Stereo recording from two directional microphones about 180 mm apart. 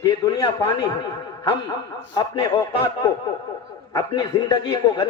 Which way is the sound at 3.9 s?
20° left (ahead or behind).